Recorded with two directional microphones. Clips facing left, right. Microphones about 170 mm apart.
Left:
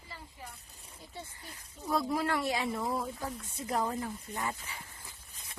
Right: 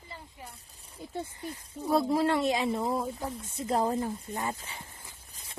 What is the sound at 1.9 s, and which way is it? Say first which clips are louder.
Speech: right 5 dB; 30° right (ahead or behind).